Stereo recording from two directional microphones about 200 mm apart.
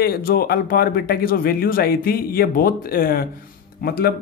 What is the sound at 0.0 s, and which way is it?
Speech, 50° left (ahead or behind).